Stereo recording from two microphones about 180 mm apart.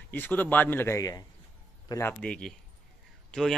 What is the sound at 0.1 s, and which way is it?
Speech, 10° left (ahead or behind).